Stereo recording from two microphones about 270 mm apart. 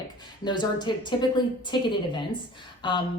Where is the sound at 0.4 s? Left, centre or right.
Centre.